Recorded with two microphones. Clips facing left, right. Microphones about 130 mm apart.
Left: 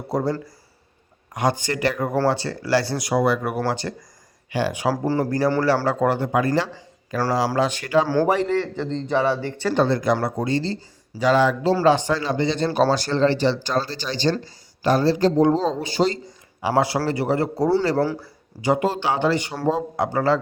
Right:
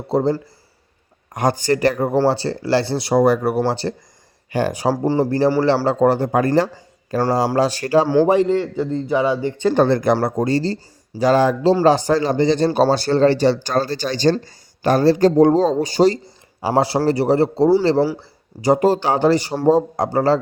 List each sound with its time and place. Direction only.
0.1 s speech: 25° right (ahead or behind)
1.3 s speech: 45° right (ahead or behind)
5.0 s speech: 20° right (ahead or behind); by 8.0 s 35° right (ahead or behind)
8.0 s speech: 20° right (ahead or behind)
8.6 s speech: 10° right (ahead or behind)
9.7 s speech: 50° right (ahead or behind); by 17.7 s 30° right (ahead or behind)
18.6 s speech: 40° right (ahead or behind)